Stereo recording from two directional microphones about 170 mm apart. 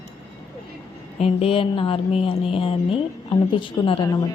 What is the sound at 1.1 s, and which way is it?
Speech, 35° left (ahead or behind).